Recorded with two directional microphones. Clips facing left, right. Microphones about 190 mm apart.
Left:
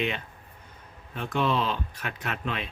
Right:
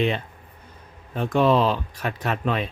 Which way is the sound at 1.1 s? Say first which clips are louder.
Right 8 dB; 40° right (ahead or behind).